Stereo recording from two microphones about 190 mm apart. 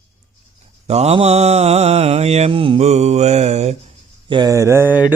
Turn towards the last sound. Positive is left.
turn(degrees=-10)  # may be behind; listen again after turning